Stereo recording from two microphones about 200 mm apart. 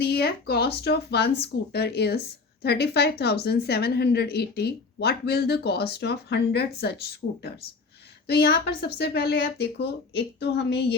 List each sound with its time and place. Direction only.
0.0 s speech: 50° left (ahead or behind)